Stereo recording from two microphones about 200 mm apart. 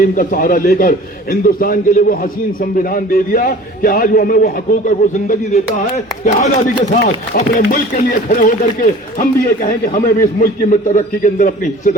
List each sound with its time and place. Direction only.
0.2 s a man's voice: 45° left (ahead or behind)